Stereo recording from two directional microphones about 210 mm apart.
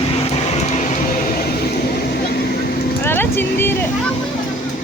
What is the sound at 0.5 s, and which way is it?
Music, 35° left (ahead or behind).